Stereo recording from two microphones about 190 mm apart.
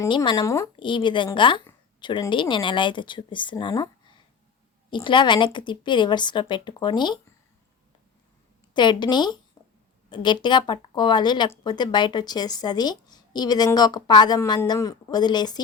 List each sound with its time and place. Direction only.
0.0 s speech: 20° left (ahead or behind)
4.9 s speech: 25° left (ahead or behind)
8.7 s speech: 25° left (ahead or behind)